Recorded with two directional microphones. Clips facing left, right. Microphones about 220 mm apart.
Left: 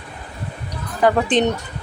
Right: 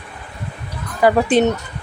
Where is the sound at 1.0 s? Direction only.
10° right (ahead or behind).